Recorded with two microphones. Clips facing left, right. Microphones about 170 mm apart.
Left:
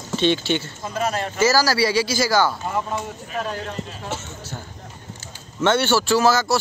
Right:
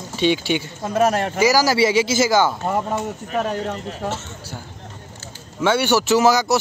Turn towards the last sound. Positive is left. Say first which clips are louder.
# right 2 dB
turn(degrees=-20)  # may be behind; listen again after turning